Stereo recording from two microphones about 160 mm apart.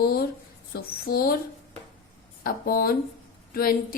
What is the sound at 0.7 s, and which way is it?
Speech, 70° left (ahead or behind).